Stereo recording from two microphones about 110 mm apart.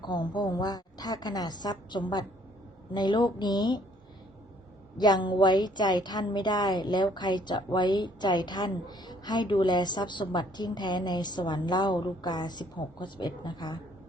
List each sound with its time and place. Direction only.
0.0 s a woman's voice: 40° left (ahead or behind)
4.9 s a woman's voice: 40° left (ahead or behind)